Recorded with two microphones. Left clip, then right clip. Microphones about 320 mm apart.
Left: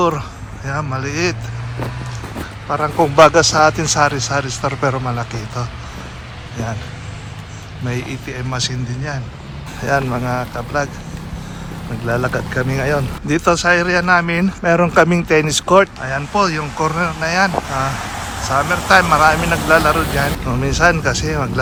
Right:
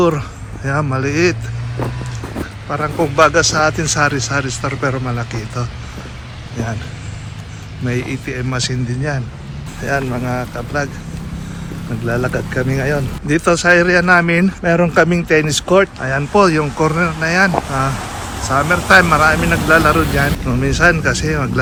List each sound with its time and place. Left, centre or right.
0.0 s speech: centre
2.6 s a man's voice: centre
7.9 s a man's voice: centre
9.8 s a man's voice: centre
12.0 s a man's voice: centre
16.0 s a man's voice: centre